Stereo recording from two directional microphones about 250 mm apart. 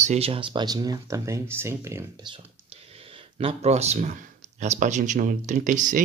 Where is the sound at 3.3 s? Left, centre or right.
Right.